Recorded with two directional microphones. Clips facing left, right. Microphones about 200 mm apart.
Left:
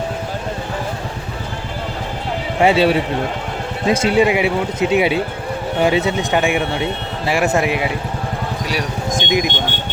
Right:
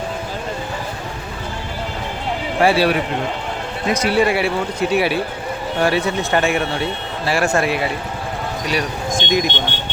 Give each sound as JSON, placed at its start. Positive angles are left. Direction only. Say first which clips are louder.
{"t": 2.6, "sound": "speech", "louder": "left 2 dB", "side_deg": 20}
{"t": 9.1, "sound": "speech", "louder": "even", "side_deg": 15}